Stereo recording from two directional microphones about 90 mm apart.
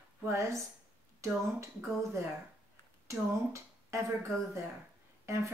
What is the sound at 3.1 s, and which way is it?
Speech, 35° right (ahead or behind).